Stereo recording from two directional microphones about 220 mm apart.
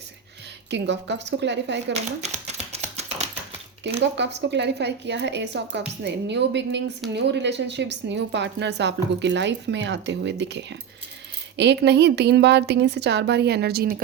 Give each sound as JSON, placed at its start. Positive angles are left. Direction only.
{"t": 0.7, "sound": "speech", "side_deg": -50}
{"t": 2.2, "sound": "typewriter", "side_deg": -30}
{"t": 4.0, "sound": "speech", "side_deg": -50}